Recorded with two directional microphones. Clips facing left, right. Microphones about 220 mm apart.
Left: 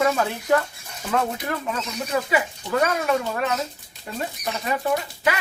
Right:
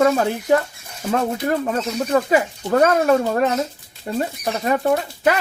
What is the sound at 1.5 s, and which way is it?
Speech, 45° right (ahead or behind).